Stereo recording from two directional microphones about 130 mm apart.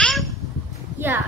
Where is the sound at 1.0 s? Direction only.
15° right (ahead or behind).